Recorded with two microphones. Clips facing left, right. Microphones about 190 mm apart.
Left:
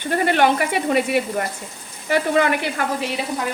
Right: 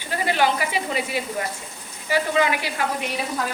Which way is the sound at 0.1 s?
60° left (ahead or behind).